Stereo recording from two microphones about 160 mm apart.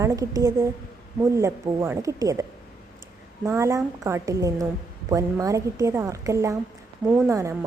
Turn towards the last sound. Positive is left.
turn(degrees=-20)  # may be behind; listen again after turning